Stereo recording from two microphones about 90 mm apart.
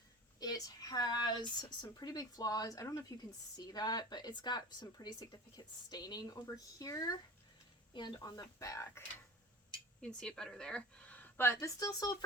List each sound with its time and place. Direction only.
0.3 s speech: 45° left (ahead or behind)
7.9 s speech: 55° left (ahead or behind); by 8.9 s 40° left (ahead or behind)
10.0 s a woman's voice: 10° left (ahead or behind)
11.6 s speech: 45° left (ahead or behind)